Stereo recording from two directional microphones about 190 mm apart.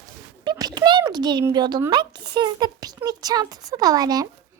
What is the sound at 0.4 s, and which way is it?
Speech, 20° right (ahead or behind).